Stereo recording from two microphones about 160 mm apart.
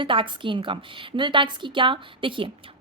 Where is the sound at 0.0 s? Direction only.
30° right (ahead or behind).